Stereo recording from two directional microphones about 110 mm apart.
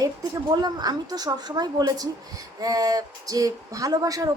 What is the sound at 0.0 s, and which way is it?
Speech, 35° right (ahead or behind).